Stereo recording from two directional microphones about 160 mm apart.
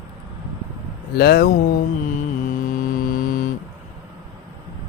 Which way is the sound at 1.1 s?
75° left (ahead or behind).